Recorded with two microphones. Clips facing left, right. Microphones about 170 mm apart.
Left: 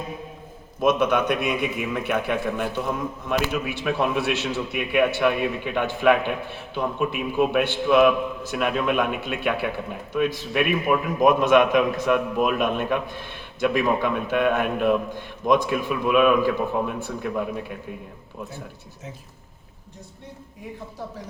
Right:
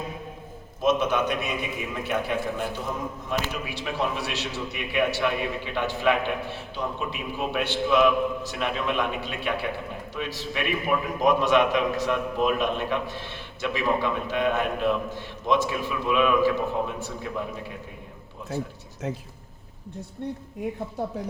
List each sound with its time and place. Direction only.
0.8 s a man's voice: 55° left (ahead or behind)